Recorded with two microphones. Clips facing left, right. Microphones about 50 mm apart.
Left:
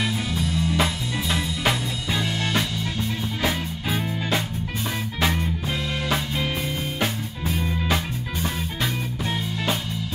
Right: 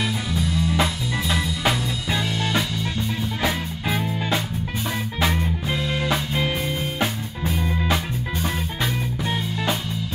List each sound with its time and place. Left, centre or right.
0.0 s music: centre
2.0 s music: centre
3.4 s music: right
7.5 s music: centre